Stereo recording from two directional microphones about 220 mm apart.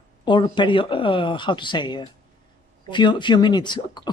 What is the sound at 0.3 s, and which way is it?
Speech, 20° left (ahead or behind).